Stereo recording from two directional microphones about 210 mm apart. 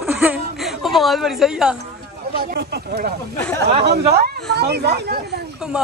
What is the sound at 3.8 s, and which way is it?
Speech, 50° right (ahead or behind).